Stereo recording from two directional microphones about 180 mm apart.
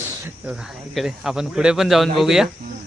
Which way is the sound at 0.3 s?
5° right (ahead or behind).